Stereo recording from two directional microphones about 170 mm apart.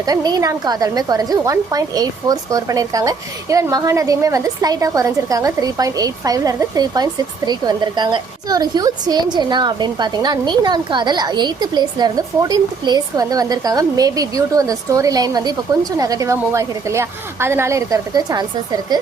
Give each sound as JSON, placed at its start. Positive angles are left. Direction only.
{"t": 0.0, "sound": "a woman's voice", "side_deg": -20}